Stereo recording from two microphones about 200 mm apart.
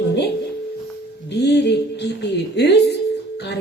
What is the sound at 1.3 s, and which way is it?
Speech, 60° left (ahead or behind).